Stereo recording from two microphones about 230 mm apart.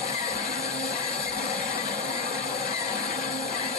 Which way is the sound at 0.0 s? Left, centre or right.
Left.